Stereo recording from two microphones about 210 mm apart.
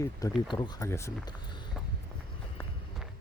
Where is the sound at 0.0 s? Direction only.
15° left (ahead or behind).